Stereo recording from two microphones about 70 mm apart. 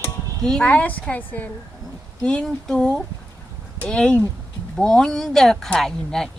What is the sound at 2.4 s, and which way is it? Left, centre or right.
Speech, centre.